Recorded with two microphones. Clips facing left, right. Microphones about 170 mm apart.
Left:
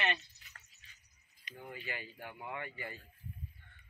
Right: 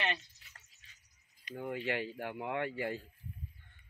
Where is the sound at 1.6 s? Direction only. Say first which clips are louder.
Right 9 dB; 80° right.